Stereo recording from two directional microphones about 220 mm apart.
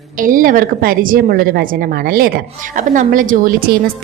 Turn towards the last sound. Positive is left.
turn(degrees=-40)  # may be behind; listen again after turning